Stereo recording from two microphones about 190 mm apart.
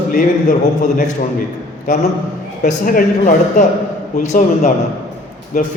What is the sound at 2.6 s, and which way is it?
A man's voice, 45° left (ahead or behind).